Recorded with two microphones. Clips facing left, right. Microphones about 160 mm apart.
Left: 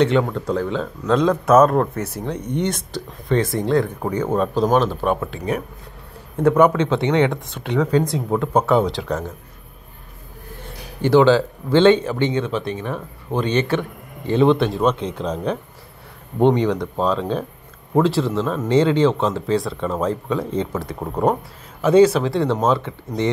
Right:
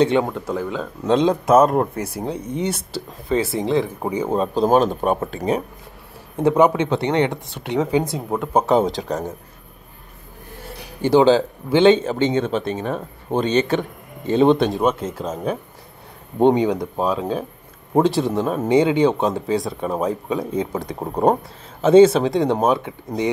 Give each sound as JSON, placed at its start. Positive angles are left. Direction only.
{"t": 0.0, "sound": "speech", "side_deg": -15}
{"t": 1.0, "sound": "a man's voice", "side_deg": -25}
{"t": 1.7, "sound": "speech", "side_deg": -15}
{"t": 4.3, "sound": "a man's voice", "side_deg": -30}
{"t": 4.7, "sound": "speech", "side_deg": -40}
{"t": 6.4, "sound": "speech", "side_deg": -15}
{"t": 8.1, "sound": "speech", "side_deg": -5}
{"t": 8.6, "sound": "speech", "side_deg": -40}
{"t": 11.0, "sound": "a man's voice", "side_deg": -15}
{"t": 17.9, "sound": "speech", "side_deg": -20}